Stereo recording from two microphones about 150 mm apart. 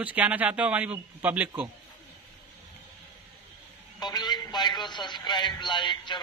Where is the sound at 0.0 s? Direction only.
10° right (ahead or behind).